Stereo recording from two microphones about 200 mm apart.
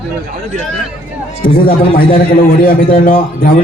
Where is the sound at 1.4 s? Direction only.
45° left (ahead or behind).